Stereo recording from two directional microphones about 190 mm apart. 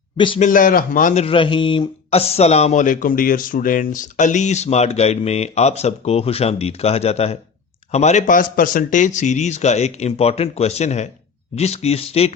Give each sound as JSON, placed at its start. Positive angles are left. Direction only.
{"t": 0.3, "sound": "speech", "side_deg": 45}
{"t": 1.2, "sound": "speech", "side_deg": 30}